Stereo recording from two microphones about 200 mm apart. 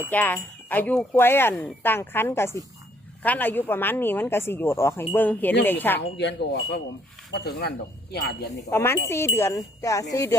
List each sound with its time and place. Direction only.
0.1 s speech: 10° left (ahead or behind)
6.1 s speech: 60° left (ahead or behind)
8.7 s speech: 10° left (ahead or behind)